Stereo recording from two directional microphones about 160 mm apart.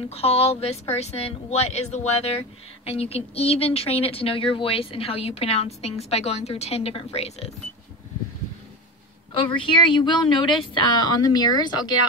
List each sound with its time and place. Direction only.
0.1 s speech: 40° left (ahead or behind)
9.3 s speech: 35° left (ahead or behind)